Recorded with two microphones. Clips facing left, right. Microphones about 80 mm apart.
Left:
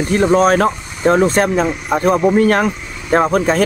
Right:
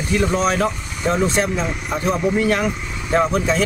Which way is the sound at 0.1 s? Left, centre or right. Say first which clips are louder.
Left 6 dB; left.